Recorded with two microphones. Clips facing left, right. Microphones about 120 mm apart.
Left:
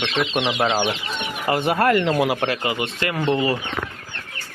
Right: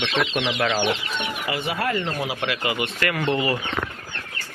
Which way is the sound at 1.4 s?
55° left (ahead or behind).